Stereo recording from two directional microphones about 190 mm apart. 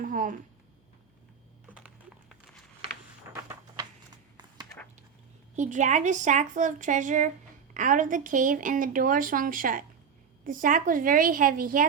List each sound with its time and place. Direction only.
0.0 s speech: 45° right (ahead or behind)
1.7 s typing: 5° right (ahead or behind)
5.5 s a woman's voice: 40° right (ahead or behind)